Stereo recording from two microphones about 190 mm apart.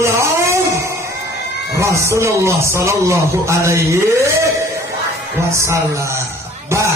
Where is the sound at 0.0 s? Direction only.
15° right (ahead or behind).